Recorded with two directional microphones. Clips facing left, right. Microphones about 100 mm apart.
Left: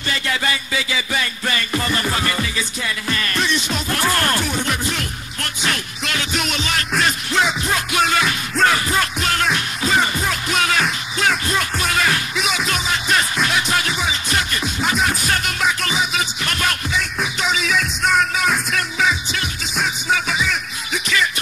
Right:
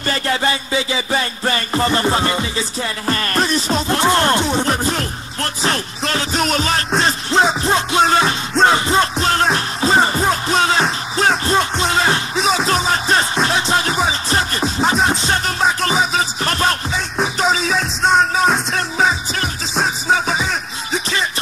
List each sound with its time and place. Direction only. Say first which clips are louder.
0.0 s music: right 4 dB; 40° right (ahead or behind)